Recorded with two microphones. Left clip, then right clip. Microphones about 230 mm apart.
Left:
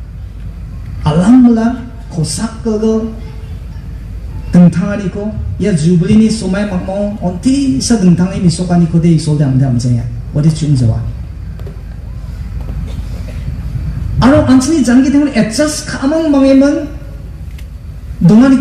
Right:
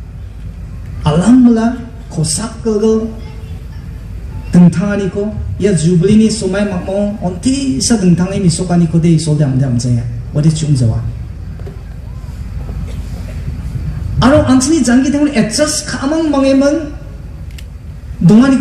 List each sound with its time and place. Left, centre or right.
1.0 s a sound: right
2.1 s a man's voice: right
4.5 s a man's voice: right
14.2 s a man's voice: right
18.2 s a man's voice: right